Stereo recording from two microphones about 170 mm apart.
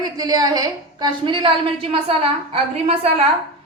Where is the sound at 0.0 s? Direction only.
20° right (ahead or behind).